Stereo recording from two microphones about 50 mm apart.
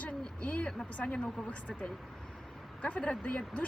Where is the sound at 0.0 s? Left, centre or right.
Left.